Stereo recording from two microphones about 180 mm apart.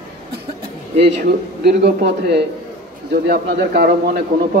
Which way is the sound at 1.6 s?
65° right (ahead or behind).